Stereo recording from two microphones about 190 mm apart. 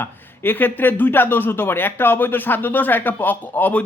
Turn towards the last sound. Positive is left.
turn(degrees=10)  # may be behind; listen again after turning